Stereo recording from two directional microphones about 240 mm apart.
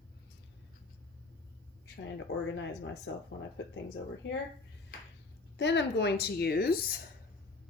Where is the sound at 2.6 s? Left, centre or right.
Left.